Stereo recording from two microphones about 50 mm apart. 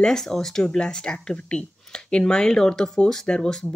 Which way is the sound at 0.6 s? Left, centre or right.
Centre.